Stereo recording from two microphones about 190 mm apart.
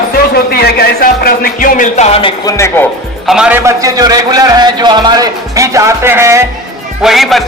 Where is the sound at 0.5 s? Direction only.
55° left (ahead or behind); by 2.3 s 30° left (ahead or behind).